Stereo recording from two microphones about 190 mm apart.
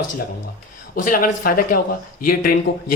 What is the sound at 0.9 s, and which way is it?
Speech, 45° left (ahead or behind).